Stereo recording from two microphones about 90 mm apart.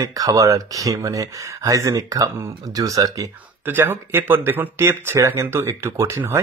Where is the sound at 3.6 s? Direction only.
25° right (ahead or behind).